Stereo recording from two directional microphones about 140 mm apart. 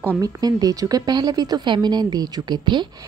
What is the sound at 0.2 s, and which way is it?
A woman's voice, 30° right (ahead or behind).